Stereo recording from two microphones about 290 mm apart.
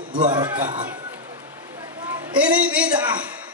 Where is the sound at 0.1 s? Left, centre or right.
Centre.